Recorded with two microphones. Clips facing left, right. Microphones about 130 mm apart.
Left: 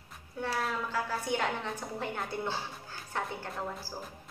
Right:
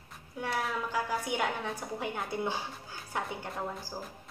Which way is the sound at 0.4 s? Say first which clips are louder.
Even; 15° right (ahead or behind).